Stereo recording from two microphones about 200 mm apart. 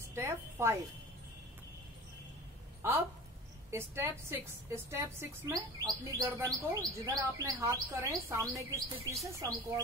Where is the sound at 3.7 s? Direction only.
10° right (ahead or behind).